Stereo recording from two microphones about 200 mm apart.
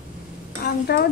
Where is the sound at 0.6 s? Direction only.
50° left (ahead or behind).